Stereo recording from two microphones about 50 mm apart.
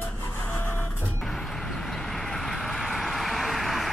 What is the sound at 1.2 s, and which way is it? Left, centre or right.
Vehicle, centre.